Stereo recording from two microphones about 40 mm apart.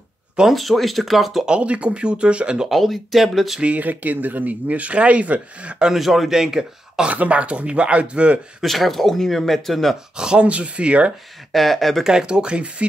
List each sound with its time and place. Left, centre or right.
0.5 s speech: centre
1.6 s speech: right
2.7 s speech: centre
3.6 s speech: right
5.9 s speech: centre
7.1 s speech: right
8.6 s speech: centre
10.1 s speech: centre
10.4 s speech: right
11.5 s speech: centre
12.0 s speech: centre